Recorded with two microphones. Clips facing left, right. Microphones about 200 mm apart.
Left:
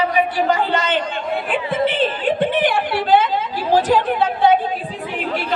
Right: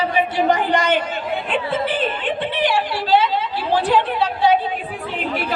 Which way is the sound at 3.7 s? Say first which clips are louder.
Left 2 dB; 40° left (ahead or behind).